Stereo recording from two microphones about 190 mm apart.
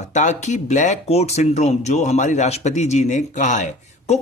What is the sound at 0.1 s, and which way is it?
Speech, 40° left (ahead or behind).